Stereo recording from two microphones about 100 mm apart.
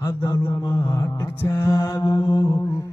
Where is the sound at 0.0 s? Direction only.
40° left (ahead or behind).